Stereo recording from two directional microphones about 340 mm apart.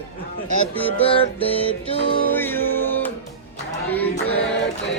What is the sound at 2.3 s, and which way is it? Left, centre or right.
Music, centre.